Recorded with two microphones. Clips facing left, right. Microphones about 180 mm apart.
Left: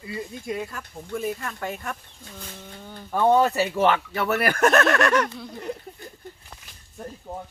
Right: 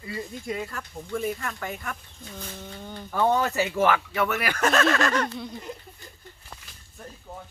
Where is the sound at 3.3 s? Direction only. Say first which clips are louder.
Left 5 dB; 25° left (ahead or behind); by 5.2 s 70° left (ahead or behind).